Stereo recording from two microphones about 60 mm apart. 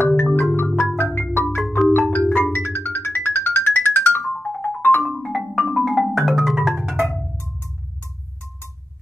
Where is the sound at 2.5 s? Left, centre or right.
Left.